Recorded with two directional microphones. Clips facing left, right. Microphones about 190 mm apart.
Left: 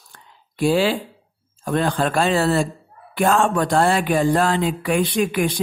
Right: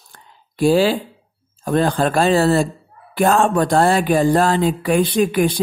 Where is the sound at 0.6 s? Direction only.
40° right (ahead or behind).